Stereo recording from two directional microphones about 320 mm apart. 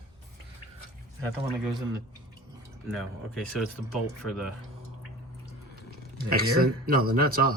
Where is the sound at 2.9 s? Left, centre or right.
Centre.